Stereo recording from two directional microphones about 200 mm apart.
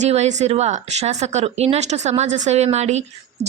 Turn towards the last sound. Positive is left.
turn(degrees=-35)  # may be behind; listen again after turning